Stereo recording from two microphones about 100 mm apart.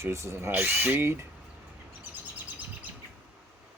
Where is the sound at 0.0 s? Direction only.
30° right (ahead or behind).